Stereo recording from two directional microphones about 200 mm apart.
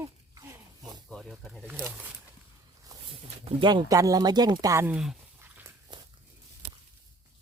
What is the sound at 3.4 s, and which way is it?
Speech, 20° right (ahead or behind).